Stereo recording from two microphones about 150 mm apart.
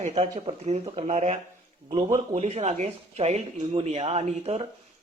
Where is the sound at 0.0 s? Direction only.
45° right (ahead or behind).